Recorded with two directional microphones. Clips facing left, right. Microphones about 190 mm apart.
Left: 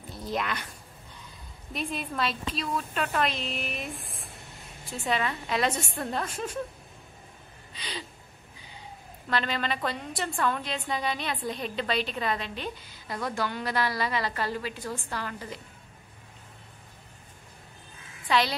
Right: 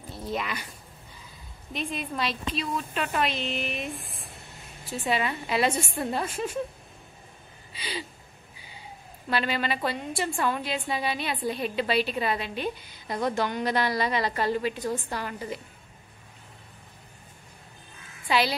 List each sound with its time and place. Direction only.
0.2 s a woman's voice: centre (ahead or behind)
7.7 s gasp: 5° right (ahead or behind)
9.3 s a woman's voice: 10° right (ahead or behind)